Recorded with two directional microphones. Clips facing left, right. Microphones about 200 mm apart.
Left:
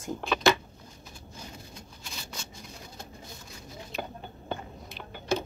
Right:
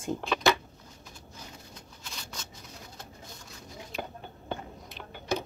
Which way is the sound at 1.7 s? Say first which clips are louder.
Left 2 dB; 10° left (ahead or behind).